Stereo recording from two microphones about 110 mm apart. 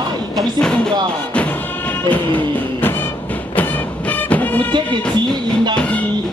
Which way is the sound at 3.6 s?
15° left (ahead or behind).